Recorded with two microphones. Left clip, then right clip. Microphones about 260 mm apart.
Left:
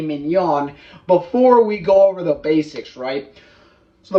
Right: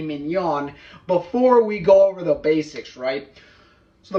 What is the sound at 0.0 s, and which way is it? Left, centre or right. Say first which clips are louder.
A man's voice: left 5 dB; centre.